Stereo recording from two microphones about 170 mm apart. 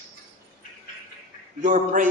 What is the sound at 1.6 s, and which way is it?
Speech, 50° right (ahead or behind).